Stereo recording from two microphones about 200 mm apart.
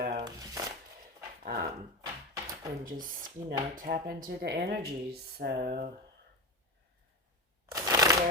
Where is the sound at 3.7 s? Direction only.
45° right (ahead or behind).